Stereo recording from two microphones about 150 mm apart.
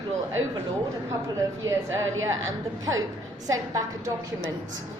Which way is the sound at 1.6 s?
20° right (ahead or behind).